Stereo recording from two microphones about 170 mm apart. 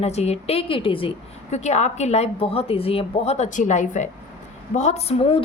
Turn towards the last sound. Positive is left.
turn(degrees=35)  # may be behind; listen again after turning